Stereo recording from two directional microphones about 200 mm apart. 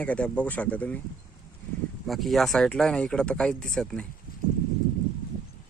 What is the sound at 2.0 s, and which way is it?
Speech, centre (ahead or behind).